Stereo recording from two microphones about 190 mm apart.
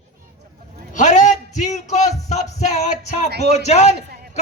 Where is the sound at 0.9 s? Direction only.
40° left (ahead or behind).